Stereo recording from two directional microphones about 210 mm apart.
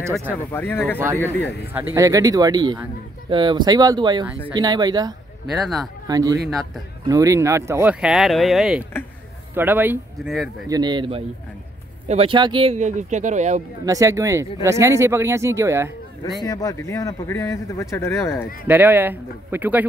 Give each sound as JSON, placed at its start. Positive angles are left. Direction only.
{"t": 0.0, "sound": "speech", "side_deg": -10}
{"t": 0.3, "sound": "a man's voice", "side_deg": 10}
{"t": 0.9, "sound": "speech", "side_deg": -10}
{"t": 5.5, "sound": "speech", "side_deg": 0}
{"t": 6.0, "sound": "speech", "side_deg": -15}
{"t": 10.7, "sound": "speech", "side_deg": -20}
{"t": 12.7, "sound": "speech", "side_deg": -35}
{"t": 13.8, "sound": "speech", "side_deg": -15}
{"t": 16.3, "sound": "a man's voice", "side_deg": 15}
{"t": 18.7, "sound": "speech", "side_deg": -10}